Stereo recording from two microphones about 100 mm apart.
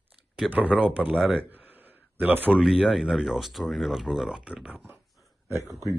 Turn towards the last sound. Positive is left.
turn(degrees=-35)  # may be behind; listen again after turning